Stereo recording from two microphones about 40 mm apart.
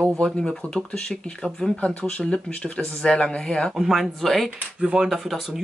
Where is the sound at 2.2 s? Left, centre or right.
Centre.